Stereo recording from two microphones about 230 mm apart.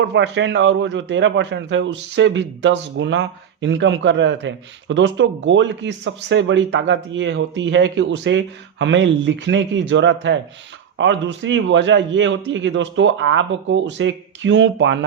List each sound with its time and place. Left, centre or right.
0.0 s a man's voice: right